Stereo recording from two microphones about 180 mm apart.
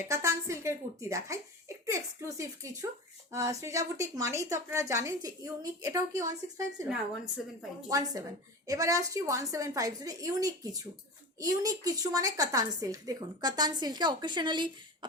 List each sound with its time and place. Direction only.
0.1 s a woman's voice: 15° right (ahead or behind)
7.9 s a woman's voice: 20° right (ahead or behind)